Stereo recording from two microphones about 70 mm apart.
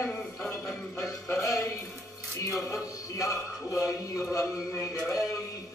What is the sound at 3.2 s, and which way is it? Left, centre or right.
A man's voice, left.